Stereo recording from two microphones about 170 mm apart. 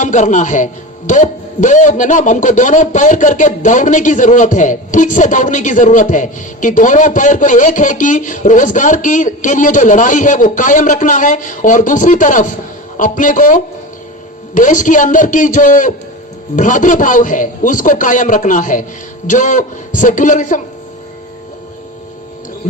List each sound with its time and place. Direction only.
0.0 s a man's voice: 45° left (ahead or behind)